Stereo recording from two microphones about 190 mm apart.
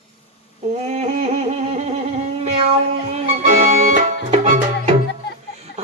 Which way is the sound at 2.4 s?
35° right (ahead or behind).